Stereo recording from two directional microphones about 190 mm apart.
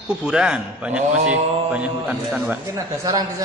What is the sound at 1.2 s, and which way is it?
Mantra, 40° right (ahead or behind).